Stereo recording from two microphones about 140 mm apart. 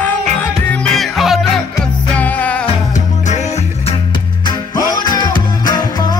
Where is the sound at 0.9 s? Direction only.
Centre (ahead or behind).